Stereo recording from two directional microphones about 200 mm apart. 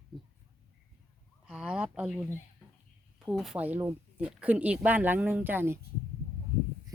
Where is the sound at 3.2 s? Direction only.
Centre (ahead or behind).